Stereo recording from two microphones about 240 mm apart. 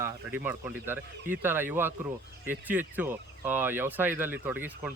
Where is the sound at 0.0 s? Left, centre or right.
Centre.